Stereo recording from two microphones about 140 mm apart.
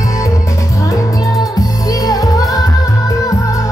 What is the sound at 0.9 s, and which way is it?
Music, 25° left (ahead or behind).